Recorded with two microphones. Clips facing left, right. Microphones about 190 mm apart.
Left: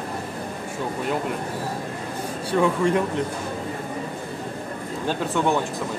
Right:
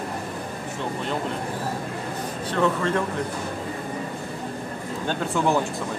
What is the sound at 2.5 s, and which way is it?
Speech, 15° left (ahead or behind).